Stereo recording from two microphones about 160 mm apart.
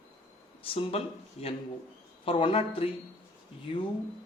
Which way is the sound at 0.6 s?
35° left (ahead or behind).